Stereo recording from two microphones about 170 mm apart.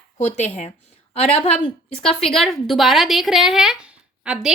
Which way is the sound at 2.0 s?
5° left (ahead or behind).